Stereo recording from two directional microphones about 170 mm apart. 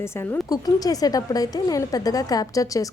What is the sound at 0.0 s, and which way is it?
A woman's voice, 15° left (ahead or behind).